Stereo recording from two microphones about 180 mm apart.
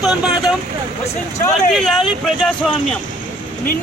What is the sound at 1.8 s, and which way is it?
Speech, centre (ahead or behind).